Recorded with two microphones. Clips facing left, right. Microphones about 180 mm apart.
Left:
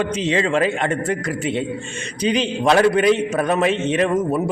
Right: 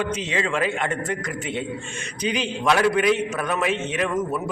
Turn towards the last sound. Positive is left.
turn(degrees=30)  # may be behind; listen again after turning